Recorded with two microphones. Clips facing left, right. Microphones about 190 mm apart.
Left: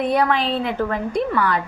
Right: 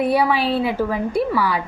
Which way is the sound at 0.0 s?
5° right (ahead or behind).